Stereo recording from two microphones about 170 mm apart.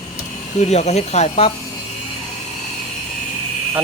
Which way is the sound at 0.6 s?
40° left (ahead or behind).